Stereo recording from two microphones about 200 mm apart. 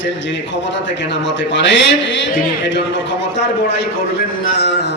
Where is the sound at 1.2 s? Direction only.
65° left (ahead or behind).